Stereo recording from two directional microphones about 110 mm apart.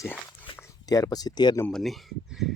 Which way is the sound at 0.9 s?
35° left (ahead or behind).